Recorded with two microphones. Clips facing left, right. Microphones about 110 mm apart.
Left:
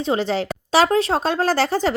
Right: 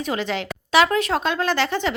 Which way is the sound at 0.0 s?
30° left (ahead or behind).